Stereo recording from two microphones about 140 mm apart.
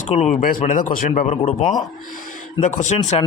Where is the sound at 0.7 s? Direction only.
75° left (ahead or behind).